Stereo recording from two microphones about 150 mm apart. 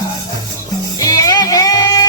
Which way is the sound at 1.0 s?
25° left (ahead or behind).